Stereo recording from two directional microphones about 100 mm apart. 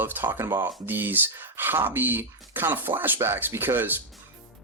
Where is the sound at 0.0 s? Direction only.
20° right (ahead or behind).